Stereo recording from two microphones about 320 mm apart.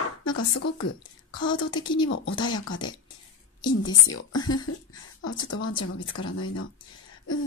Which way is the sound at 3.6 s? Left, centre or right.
Centre.